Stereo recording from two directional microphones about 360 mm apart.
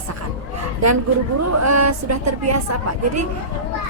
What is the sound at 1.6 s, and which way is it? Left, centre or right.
Speech, right.